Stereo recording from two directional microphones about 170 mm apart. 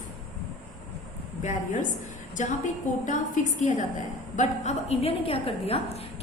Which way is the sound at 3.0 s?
45° left (ahead or behind).